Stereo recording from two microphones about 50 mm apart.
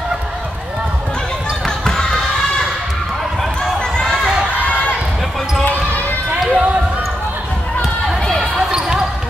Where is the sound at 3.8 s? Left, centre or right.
Centre.